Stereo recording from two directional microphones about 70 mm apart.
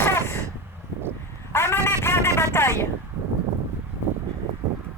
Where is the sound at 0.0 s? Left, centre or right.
Left.